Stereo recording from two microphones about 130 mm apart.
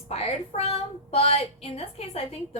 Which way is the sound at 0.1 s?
50° left (ahead or behind).